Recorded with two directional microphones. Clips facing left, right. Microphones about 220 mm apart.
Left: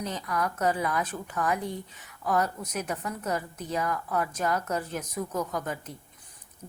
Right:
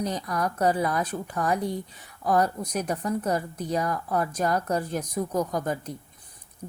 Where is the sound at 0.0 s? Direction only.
35° right (ahead or behind).